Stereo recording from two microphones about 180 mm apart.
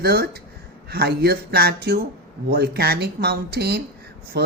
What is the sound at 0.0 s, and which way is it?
A woman's voice, 60° right (ahead or behind).